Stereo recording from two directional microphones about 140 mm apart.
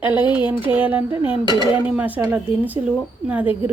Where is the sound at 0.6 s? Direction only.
10° right (ahead or behind).